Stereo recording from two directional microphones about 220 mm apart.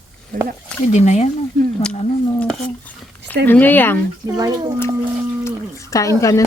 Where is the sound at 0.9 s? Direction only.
30° left (ahead or behind).